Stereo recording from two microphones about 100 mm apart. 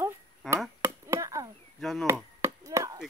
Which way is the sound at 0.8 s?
30° right (ahead or behind).